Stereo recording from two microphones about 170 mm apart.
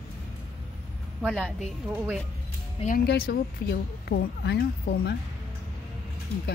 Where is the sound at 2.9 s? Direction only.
70° left (ahead or behind).